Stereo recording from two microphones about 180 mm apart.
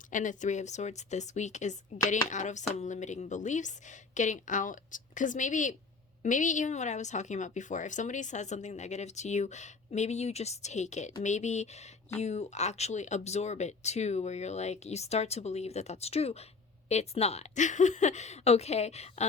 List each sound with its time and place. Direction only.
0.1 s speech: 45° left (ahead or behind)